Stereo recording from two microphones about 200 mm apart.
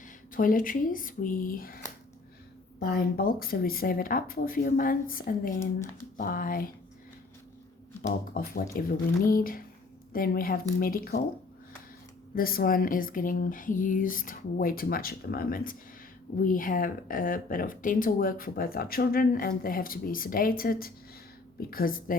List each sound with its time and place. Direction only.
0.0 s speech: 45° left (ahead or behind)
2.8 s speech: 50° left (ahead or behind)
8.0 s speech: 45° left (ahead or behind)
12.3 s speech: 45° left (ahead or behind)